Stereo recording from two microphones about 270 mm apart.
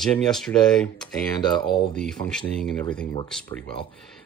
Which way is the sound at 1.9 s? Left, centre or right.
Centre.